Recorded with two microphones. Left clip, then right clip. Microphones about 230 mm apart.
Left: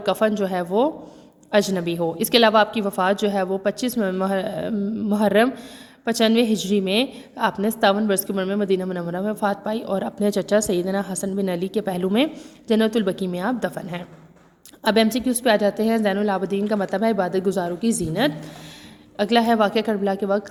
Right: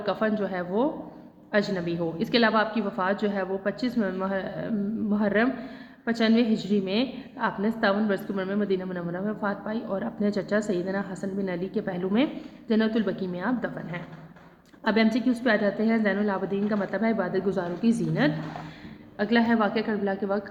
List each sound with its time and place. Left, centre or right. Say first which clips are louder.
0.0 s a woman's voice: left 6 dB; left
14.8 s a woman's voice: left 5 dB; left